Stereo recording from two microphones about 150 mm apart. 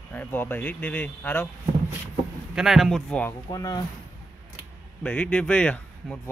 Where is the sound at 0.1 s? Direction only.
10° left (ahead or behind).